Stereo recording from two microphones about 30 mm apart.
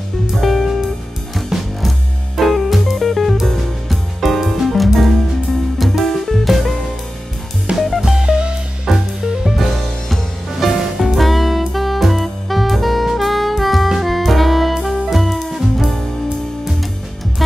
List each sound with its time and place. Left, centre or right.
0.4 s music: centre
7.7 s music: right
8.9 s music: centre
9.2 s music: centre
9.6 s music: centre
17.4 s music: centre